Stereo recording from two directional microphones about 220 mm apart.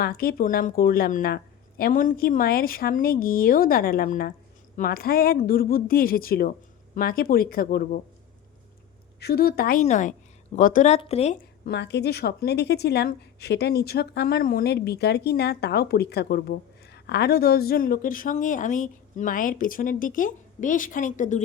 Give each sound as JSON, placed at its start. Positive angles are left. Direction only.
{"t": 0.0, "sound": "speech", "side_deg": 40}
{"t": 9.2, "sound": "speech", "side_deg": 45}
{"t": 11.6, "sound": "a woman's voice", "side_deg": 50}